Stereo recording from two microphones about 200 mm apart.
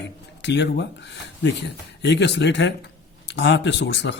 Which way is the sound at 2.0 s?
60° left (ahead or behind).